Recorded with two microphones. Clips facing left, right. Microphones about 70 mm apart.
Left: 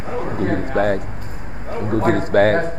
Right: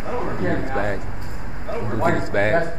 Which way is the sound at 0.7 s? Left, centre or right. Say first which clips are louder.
Left 6 dB; left.